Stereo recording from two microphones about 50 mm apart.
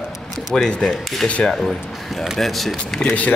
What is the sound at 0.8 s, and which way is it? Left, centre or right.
Rub, centre.